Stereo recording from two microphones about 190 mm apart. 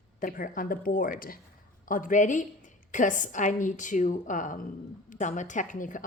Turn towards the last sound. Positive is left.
turn(degrees=45)  # may be behind; listen again after turning